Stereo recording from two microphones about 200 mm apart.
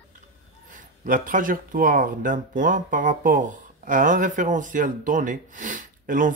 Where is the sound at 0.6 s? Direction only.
40° right (ahead or behind).